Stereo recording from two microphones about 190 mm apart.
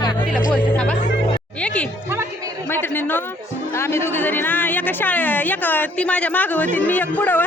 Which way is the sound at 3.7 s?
15° left (ahead or behind).